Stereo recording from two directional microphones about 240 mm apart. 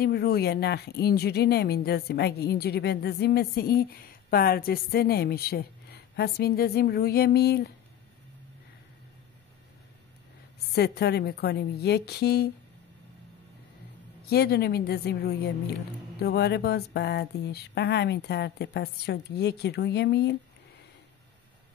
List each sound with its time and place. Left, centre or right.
0.0 s speech: left
10.7 s speech: left
14.3 s speech: left